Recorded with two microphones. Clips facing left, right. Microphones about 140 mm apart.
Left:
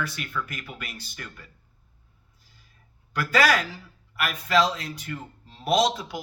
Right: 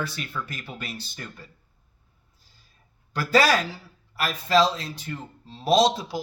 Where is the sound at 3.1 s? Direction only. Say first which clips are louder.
Right 2 dB; 30° right (ahead or behind).